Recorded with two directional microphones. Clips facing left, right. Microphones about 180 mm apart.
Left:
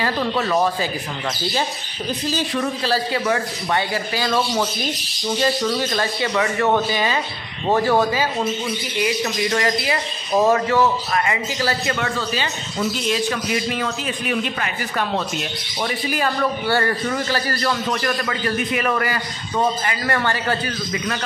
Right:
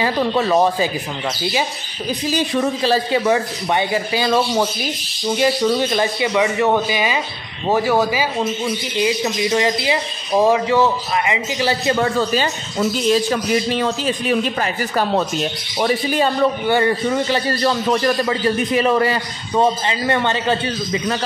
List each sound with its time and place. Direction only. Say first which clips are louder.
0.0 s a man's voice: right 4 dB; 20° right (ahead or behind)
1.5 s speech: right 2 dB; 10° right (ahead or behind)
2.5 s a man's voice: right 5 dB; 20° right (ahead or behind)
8.9 s a man's voice: right 2 dB; 20° right (ahead or behind)
13.1 s a man's voice: right 5 dB; 35° right (ahead or behind)
16.1 s a man's voice: right 5 dB; 20° right (ahead or behind)